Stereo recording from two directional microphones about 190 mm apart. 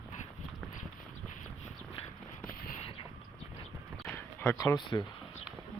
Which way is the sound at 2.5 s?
50° left (ahead or behind).